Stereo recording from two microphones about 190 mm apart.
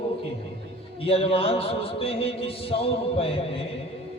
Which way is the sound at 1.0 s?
30° left (ahead or behind).